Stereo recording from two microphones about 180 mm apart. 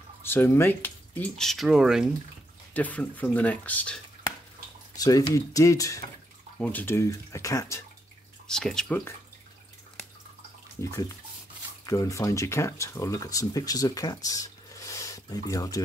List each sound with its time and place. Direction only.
0.2 s speech: 15° left (ahead or behind); by 2.1 s 5° right (ahead or behind)
2.7 s speech: 10° left (ahead or behind)
4.9 s speech: 20° left (ahead or behind)
8.5 s speech: 5° left (ahead or behind)
10.8 s speech: 15° left (ahead or behind)